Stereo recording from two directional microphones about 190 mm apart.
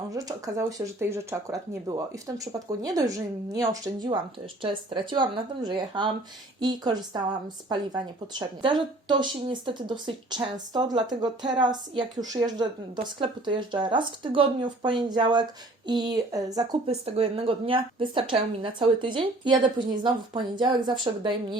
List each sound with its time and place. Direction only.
0.1 s speech: 20° right (ahead or behind)
16.8 s speech: 30° right (ahead or behind)